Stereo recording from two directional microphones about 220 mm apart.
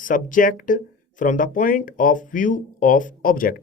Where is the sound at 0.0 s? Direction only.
40° left (ahead or behind).